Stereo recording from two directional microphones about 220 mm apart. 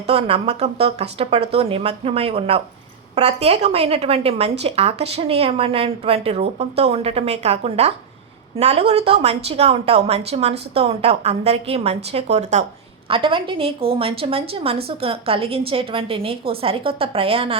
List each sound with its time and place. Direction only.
0.1 s a woman's voice: 25° right (ahead or behind)